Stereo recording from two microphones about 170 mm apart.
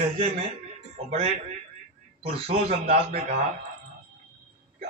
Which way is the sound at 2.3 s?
35° right (ahead or behind).